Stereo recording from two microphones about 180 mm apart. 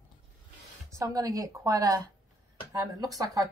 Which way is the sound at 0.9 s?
20° right (ahead or behind).